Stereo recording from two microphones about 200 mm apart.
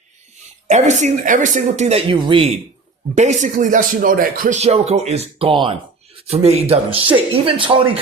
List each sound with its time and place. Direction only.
0.7 s speech: 35° right (ahead or behind)
3.2 s speech: 35° right (ahead or behind)